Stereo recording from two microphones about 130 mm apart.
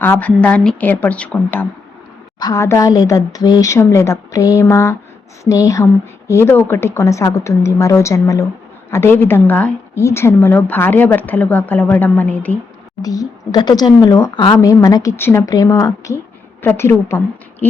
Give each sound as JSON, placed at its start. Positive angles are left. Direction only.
{"t": 0.0, "sound": "speech", "side_deg": 15}
{"t": 2.4, "sound": "speech", "side_deg": 25}
{"t": 13.0, "sound": "speech", "side_deg": 30}